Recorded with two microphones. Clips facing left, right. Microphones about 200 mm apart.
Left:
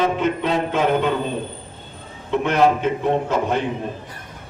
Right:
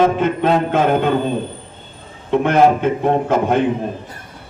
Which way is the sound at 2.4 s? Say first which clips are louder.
Right 4 dB; 55° right (ahead or behind).